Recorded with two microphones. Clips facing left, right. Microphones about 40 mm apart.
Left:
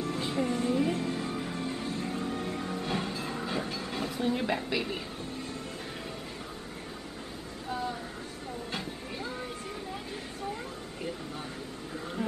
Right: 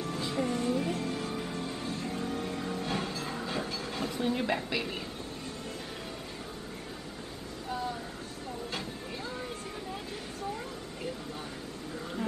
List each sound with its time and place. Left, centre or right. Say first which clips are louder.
0.1 s music: even; centre
2.4 s train: left 1 dB; centre
7.7 s music: left 1 dB; centre
8.7 s a sound: left 1 dB; centre
12.0 s music: left 1 dB; centre